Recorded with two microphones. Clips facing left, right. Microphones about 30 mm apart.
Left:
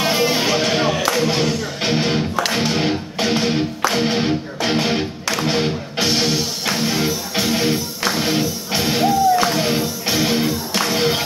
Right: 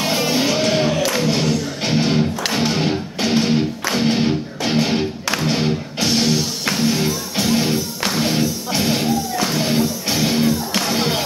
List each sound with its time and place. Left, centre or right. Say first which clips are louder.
0.0 s music: left 1 dB; centre